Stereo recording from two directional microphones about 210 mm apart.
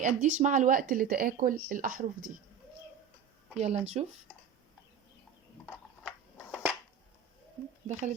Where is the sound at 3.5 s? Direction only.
30° right (ahead or behind).